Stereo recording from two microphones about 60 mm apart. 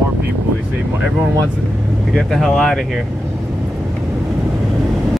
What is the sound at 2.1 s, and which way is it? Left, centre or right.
Speech, centre.